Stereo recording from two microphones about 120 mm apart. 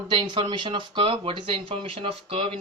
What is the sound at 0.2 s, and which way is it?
Speech, 40° right (ahead or behind).